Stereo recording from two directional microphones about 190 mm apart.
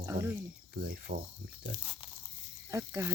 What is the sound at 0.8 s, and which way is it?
Speech, 55° right (ahead or behind).